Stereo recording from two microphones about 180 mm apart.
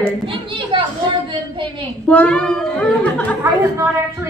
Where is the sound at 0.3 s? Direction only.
30° right (ahead or behind).